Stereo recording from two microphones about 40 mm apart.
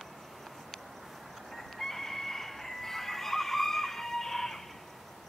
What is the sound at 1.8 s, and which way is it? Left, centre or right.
Fowl, centre.